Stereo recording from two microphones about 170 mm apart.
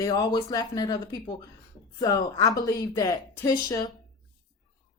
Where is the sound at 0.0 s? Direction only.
20° left (ahead or behind).